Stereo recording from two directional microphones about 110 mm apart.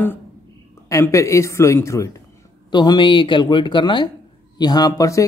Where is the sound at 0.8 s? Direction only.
25° left (ahead or behind).